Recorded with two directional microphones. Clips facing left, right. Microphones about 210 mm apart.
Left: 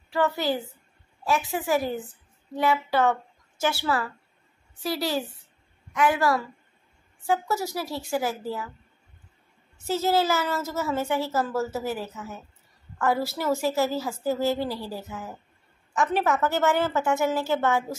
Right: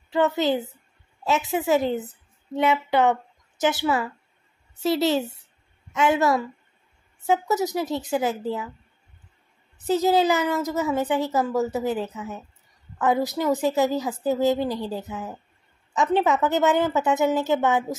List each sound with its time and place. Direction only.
0.1 s a woman's voice: 20° right (ahead or behind)
9.8 s a woman's voice: 15° right (ahead or behind)